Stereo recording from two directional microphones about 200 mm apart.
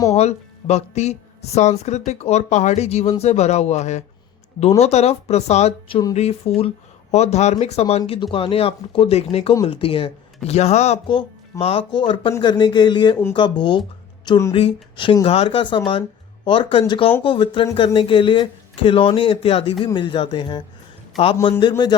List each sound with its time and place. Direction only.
0.1 s speech: 35° left (ahead or behind); by 14.5 s 15° left (ahead or behind)
14.5 s speech: 25° left (ahead or behind)